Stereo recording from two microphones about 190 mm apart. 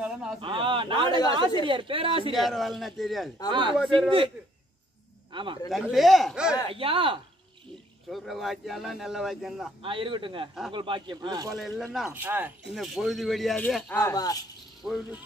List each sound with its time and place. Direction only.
0.0 s a sound: 5° right (ahead or behind)
0.4 s a sound: 25° right (ahead or behind)
1.6 s speech: 25° right (ahead or behind)
2.3 s speech: centre (ahead or behind)
5.3 s a man's voice: 25° right (ahead or behind)
5.7 s speech: centre (ahead or behind)
6.7 s speech: 30° right (ahead or behind)
8.1 s speech: centre (ahead or behind)
9.8 s speech: 25° right (ahead or behind)
11.5 s speech: centre (ahead or behind)
13.9 s speech: 20° left (ahead or behind)
14.9 s speech: centre (ahead or behind)